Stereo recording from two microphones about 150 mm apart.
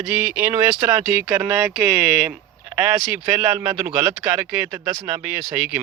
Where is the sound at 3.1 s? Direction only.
10° right (ahead or behind).